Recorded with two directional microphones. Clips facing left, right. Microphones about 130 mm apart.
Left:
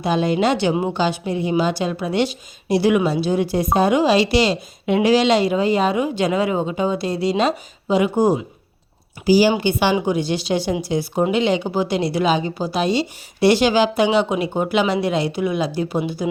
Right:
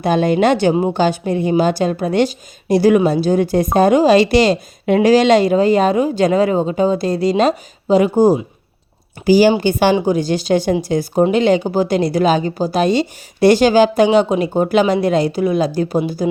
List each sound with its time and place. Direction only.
0.0 s a woman's voice: 50° right (ahead or behind)
9.2 s a woman's voice: 50° right (ahead or behind)